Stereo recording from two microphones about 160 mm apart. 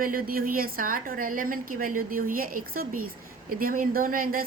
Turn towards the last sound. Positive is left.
turn(degrees=-60)  # may be behind; listen again after turning